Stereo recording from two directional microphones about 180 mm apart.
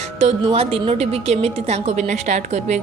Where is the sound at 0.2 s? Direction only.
35° right (ahead or behind).